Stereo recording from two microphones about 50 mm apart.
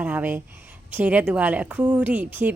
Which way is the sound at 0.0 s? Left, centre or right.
Right.